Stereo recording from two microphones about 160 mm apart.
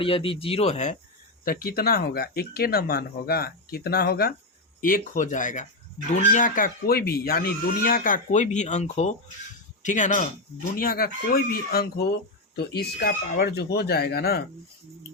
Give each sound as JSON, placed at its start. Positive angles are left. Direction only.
{"t": 0.0, "sound": "speech", "side_deg": 35}
{"t": 1.5, "sound": "speech", "side_deg": 70}
{"t": 4.8, "sound": "speech", "side_deg": 60}
{"t": 10.8, "sound": "speech", "side_deg": 65}
{"t": 12.5, "sound": "speech", "side_deg": 90}